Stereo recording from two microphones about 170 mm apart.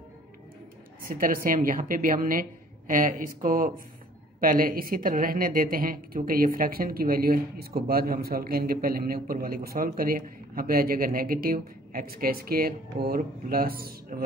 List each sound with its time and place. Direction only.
1.0 s a woman's voice: 55° right (ahead or behind)